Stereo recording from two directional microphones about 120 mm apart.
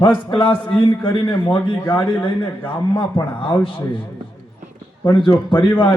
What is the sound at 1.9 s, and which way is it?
A man's voice, 45° left (ahead or behind).